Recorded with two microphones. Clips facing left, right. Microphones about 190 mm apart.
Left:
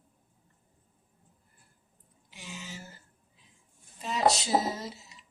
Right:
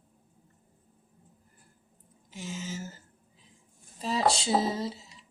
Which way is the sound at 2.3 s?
40° right (ahead or behind).